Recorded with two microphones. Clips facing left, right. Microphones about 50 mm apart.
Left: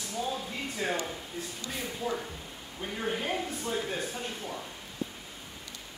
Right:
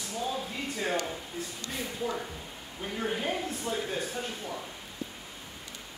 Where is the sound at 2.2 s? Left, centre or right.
Centre.